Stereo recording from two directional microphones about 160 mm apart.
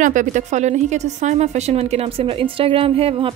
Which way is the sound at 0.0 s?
55° right (ahead or behind).